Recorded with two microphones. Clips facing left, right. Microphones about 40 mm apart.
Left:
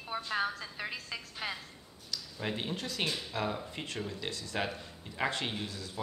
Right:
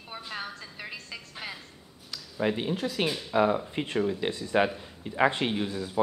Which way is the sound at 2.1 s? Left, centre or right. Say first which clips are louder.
Right 8 dB; centre.